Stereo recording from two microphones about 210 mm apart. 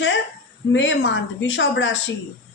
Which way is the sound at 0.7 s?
60° left (ahead or behind).